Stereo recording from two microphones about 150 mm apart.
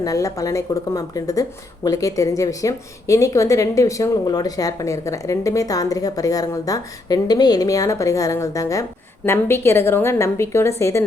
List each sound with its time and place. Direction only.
0.0 s a woman's voice: 20° left (ahead or behind)